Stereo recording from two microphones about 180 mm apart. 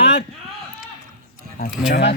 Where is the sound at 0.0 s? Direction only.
70° left (ahead or behind).